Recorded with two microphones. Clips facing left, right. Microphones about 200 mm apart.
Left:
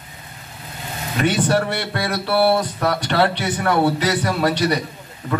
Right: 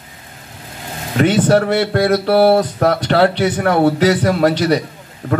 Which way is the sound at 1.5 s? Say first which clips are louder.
Right 7 dB; 50° right (ahead or behind).